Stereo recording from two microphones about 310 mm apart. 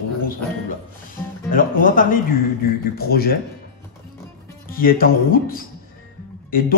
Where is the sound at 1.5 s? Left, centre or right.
Left.